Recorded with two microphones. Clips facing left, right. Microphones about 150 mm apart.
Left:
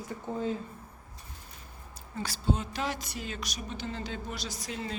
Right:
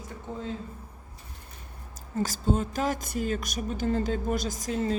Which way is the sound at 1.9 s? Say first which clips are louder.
Right 8 dB; 45° right (ahead or behind).